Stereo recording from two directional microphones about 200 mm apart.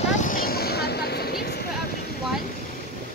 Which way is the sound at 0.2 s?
45° left (ahead or behind).